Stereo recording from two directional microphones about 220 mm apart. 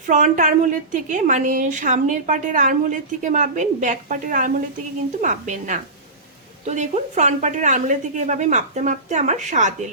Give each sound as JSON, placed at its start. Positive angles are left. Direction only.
{"t": 0.0, "sound": "a woman's voice", "side_deg": -35}